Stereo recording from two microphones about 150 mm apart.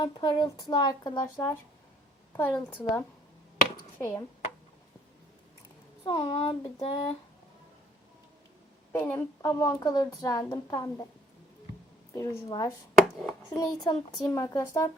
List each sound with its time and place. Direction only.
0.0 s speech: 35° left (ahead or behind)
2.3 s a woman's voice: 15° left (ahead or behind)
6.1 s speech: 35° left (ahead or behind)
8.9 s a woman's voice: 15° left (ahead or behind)
12.1 s a woman's voice: 25° left (ahead or behind)
13.0 s hands: centre (ahead or behind)
13.6 s a woman's voice: 25° left (ahead or behind)